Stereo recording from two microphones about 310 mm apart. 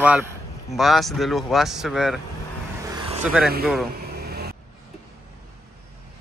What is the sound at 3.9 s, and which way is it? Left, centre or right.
Vehicle, right.